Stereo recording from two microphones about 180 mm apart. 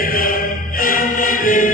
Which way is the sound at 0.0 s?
50° left (ahead or behind).